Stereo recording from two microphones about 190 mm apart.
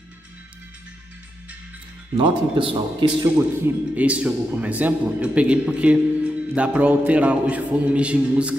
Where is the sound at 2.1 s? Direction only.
25° right (ahead or behind).